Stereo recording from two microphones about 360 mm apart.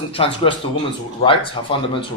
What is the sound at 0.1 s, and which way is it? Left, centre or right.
A man's voice, centre.